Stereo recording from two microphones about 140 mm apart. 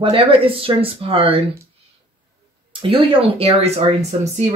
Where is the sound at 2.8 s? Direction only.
40° right (ahead or behind).